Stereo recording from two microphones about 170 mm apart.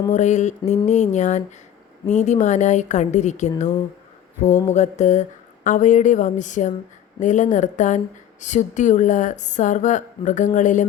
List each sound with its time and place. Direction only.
0.1 s speech: 45° left (ahead or behind)
4.7 s speech: 45° left (ahead or behind)